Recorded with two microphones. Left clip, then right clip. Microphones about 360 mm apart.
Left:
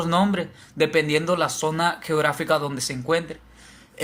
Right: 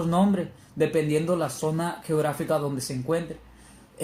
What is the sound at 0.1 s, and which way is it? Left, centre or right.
Speech, left.